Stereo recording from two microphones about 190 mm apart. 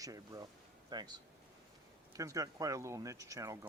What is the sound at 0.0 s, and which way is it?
Speech, 20° right (ahead or behind).